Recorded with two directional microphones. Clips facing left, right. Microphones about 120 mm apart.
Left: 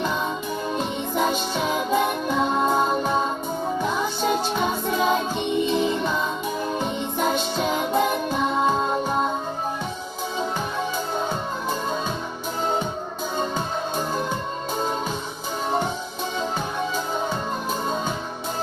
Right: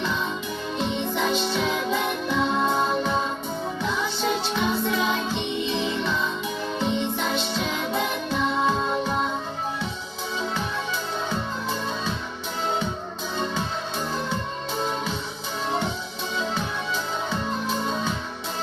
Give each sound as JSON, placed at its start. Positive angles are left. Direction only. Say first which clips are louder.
{"t": 0.7, "sound": "music", "louder": "right 2 dB", "side_deg": 45}
{"t": 10.9, "sound": "music", "louder": "left 2 dB", "side_deg": 45}
{"t": 13.9, "sound": "music", "louder": "left 3 dB", "side_deg": 45}
{"t": 16.4, "sound": "music", "louder": "left 2 dB", "side_deg": 45}